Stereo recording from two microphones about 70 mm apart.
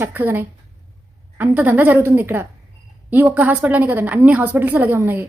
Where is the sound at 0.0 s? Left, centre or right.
Right.